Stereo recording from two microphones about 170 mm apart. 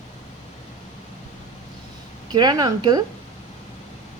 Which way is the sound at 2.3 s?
25° right (ahead or behind).